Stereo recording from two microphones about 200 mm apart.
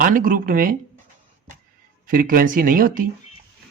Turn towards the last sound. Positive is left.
turn(degrees=-45)  # may be behind; listen again after turning